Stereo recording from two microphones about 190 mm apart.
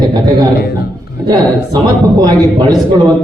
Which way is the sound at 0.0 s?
20° right (ahead or behind).